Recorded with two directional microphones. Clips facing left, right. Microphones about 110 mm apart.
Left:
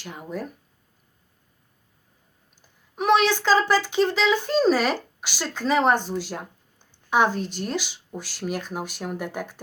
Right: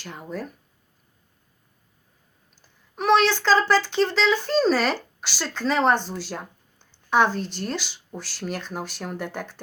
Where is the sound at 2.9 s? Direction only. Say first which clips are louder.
Even; 10° left (ahead or behind).